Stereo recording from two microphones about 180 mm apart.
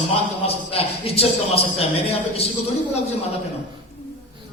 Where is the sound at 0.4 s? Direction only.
35° left (ahead or behind).